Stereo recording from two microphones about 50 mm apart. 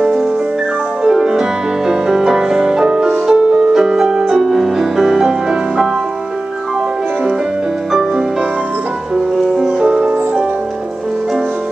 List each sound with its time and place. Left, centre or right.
1.0 s music: centre
9.6 s music: centre